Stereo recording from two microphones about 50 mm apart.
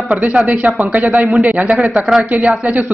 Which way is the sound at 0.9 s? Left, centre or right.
Right.